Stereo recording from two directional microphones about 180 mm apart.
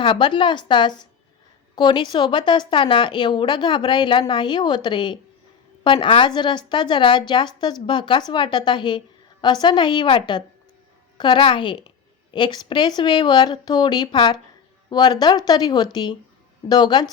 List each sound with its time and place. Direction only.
0.0 s a woman's voice: 25° left (ahead or behind)